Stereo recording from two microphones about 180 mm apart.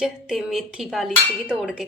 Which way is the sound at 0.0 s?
Centre (ahead or behind).